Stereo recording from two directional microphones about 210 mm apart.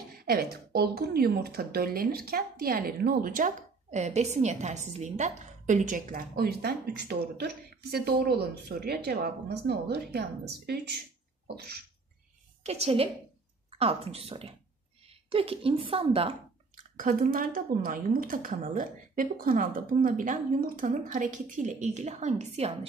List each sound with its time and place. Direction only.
0.2 s speech: 45° right (ahead or behind)
11.4 s speech: 50° right (ahead or behind)
12.6 s a woman's voice: 30° right (ahead or behind)
16.9 s speech: 40° right (ahead or behind)